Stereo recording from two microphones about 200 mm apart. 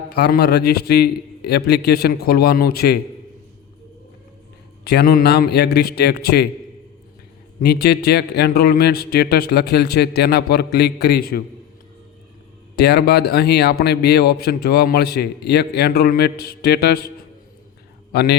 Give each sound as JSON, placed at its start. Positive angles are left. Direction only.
{"t": 0.1, "sound": "speech", "side_deg": 50}
{"t": 4.8, "sound": "speech", "side_deg": 55}
{"t": 7.6, "sound": "speech", "side_deg": 55}
{"t": 12.7, "sound": "speech", "side_deg": 55}
{"t": 18.1, "sound": "a man's voice", "side_deg": 55}